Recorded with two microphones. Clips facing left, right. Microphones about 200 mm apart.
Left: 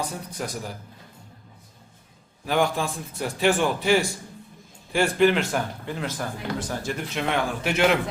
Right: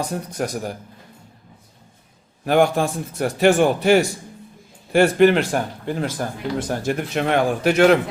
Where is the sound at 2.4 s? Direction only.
55° right (ahead or behind).